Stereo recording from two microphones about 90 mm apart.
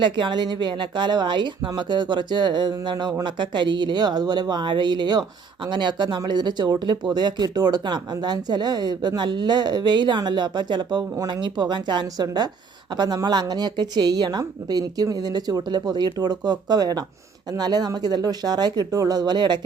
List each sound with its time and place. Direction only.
0.0 s speech: 60° right (ahead or behind)